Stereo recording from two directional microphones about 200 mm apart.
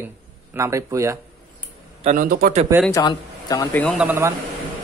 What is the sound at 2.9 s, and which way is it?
Speech, 20° left (ahead or behind).